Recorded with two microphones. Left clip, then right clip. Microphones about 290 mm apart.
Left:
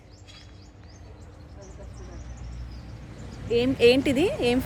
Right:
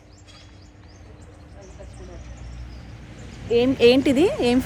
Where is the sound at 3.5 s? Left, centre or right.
Centre.